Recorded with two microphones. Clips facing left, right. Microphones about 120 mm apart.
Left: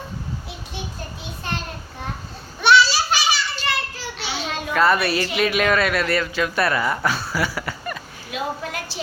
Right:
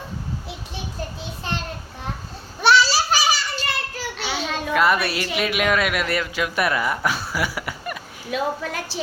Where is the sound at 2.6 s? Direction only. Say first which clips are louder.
Left 1 dB; 35° right (ahead or behind).